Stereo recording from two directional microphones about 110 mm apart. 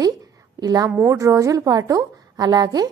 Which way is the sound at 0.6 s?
35° right (ahead or behind).